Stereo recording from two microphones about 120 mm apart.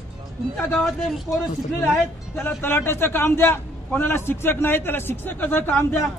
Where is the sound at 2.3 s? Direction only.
15° left (ahead or behind).